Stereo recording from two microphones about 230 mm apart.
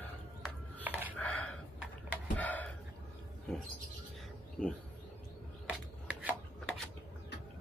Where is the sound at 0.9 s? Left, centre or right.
Centre.